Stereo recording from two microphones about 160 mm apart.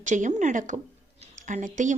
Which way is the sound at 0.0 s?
50° right (ahead or behind).